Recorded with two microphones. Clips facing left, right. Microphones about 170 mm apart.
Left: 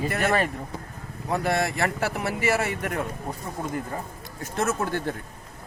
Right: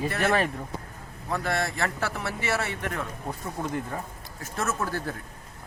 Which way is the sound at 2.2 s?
55° left (ahead or behind).